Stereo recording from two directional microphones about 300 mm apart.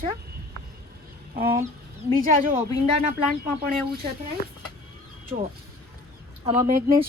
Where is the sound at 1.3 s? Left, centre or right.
Right.